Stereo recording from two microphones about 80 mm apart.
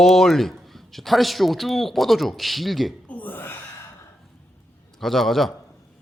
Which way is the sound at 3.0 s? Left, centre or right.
Left.